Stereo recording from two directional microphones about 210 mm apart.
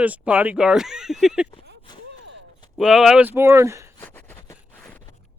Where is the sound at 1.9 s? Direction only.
20° left (ahead or behind).